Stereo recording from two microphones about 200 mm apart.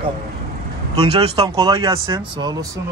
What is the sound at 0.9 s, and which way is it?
Speech, 30° right (ahead or behind).